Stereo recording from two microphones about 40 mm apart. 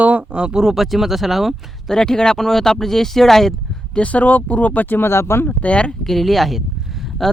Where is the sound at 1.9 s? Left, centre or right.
Centre.